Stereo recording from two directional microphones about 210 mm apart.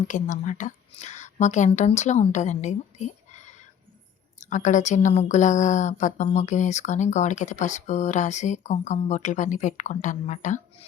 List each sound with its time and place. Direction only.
0.1 s a woman's voice: 35° left (ahead or behind)